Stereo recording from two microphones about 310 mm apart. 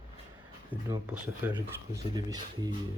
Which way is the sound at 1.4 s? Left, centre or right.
Centre.